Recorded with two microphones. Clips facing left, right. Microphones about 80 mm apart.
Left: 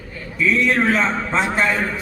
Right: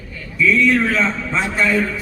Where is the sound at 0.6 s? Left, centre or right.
Left.